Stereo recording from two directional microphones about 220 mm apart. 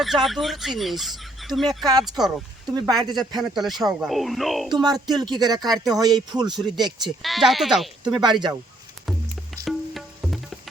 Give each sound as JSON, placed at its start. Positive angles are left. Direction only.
{"t": 0.0, "sound": "speech", "side_deg": 0}
{"t": 2.6, "sound": "speech", "side_deg": -20}
{"t": 3.5, "sound": "speech", "side_deg": 0}
{"t": 4.7, "sound": "speech", "side_deg": -20}
{"t": 7.2, "sound": "speech", "side_deg": 0}
{"t": 8.0, "sound": "speech", "side_deg": -20}
{"t": 9.1, "sound": "music", "side_deg": 0}
{"t": 9.6, "sound": "tabla", "side_deg": 0}